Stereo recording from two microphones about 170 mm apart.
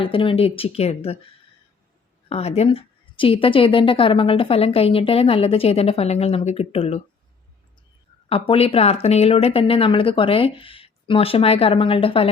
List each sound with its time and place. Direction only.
0.0 s a woman's voice: 30° left (ahead or behind)
2.3 s a woman's voice: 40° left (ahead or behind)
8.3 s a woman's voice: 35° left (ahead or behind)